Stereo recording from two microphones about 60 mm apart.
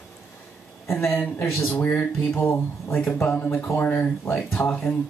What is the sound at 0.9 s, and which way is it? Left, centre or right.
Speech, left.